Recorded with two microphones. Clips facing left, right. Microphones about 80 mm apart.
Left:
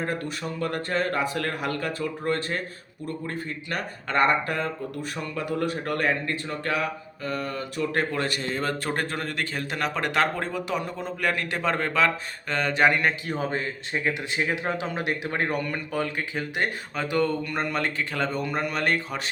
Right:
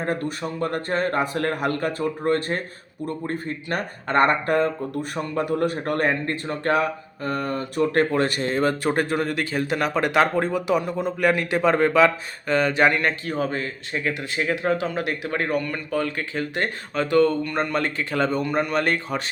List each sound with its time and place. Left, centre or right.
0.0 s speech: right
8.6 s a man's voice: centre
13.2 s speech: centre